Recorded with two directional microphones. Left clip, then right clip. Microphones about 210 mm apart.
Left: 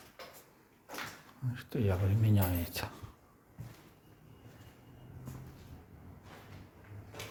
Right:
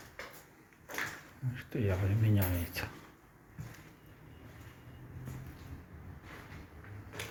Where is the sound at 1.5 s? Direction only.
20° left (ahead or behind).